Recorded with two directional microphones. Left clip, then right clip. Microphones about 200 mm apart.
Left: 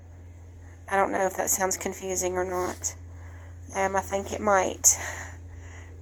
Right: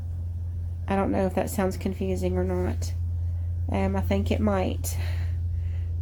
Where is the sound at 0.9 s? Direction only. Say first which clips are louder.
Left 2 dB; 15° left (ahead or behind).